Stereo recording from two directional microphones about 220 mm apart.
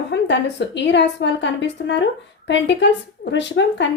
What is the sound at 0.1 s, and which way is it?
A woman's voice, 55° left (ahead or behind).